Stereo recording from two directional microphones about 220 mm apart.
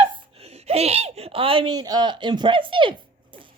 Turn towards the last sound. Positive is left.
turn(degrees=-20)  # may be behind; listen again after turning